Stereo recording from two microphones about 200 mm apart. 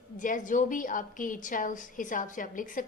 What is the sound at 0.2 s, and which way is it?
A woman's voice, 40° left (ahead or behind).